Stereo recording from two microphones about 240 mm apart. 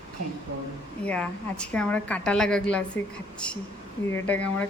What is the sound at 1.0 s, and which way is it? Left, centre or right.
Speech, centre.